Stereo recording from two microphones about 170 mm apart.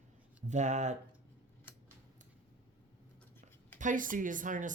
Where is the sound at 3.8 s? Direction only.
50° right (ahead or behind).